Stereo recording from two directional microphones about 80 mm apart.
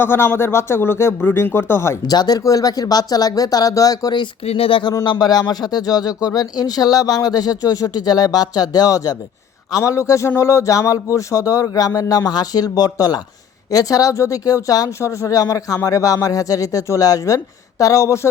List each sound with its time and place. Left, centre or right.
0.0 s speech: left
2.0 s speech: left
4.7 s speech: left
5.2 s speech: left
9.7 s speech: left